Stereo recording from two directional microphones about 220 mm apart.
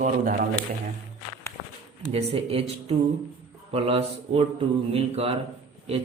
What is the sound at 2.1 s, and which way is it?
Speech, 25° right (ahead or behind).